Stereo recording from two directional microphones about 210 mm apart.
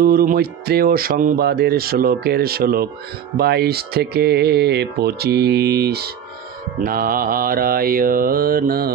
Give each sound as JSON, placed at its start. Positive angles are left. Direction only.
{"t": 0.0, "sound": "speech", "side_deg": -45}